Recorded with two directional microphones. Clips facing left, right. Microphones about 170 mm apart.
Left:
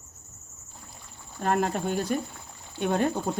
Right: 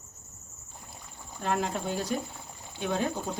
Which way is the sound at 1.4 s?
50° left (ahead or behind).